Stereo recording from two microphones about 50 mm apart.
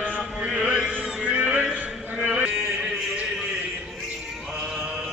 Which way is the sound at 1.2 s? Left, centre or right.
Right.